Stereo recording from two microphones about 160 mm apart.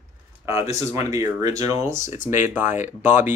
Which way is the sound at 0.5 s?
20° right (ahead or behind).